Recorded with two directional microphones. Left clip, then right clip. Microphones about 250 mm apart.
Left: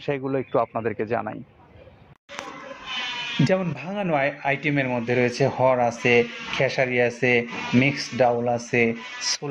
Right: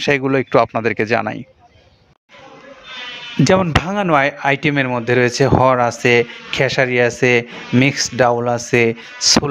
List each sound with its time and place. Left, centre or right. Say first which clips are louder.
0.0 s speech: right 10 dB; right
3.4 s speech: right 12 dB; right